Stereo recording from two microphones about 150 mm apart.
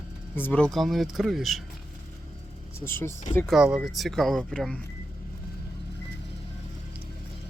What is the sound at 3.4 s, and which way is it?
Speech, 5° right (ahead or behind).